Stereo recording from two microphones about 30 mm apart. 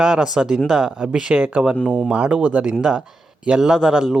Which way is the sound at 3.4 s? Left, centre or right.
Right.